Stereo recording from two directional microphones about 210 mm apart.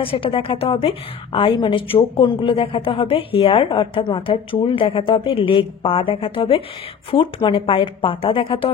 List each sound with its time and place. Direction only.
0.0 s a woman's voice: 25° left (ahead or behind)